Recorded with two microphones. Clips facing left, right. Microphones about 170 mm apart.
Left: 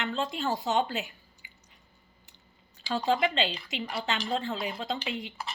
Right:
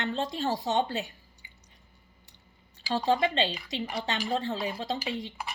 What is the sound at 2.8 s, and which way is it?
Speech, 30° right (ahead or behind).